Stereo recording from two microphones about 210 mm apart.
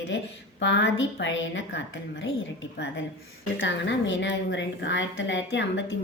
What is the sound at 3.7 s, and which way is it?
A woman's voice, 60° left (ahead or behind).